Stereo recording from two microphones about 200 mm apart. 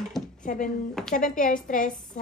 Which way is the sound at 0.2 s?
Centre (ahead or behind).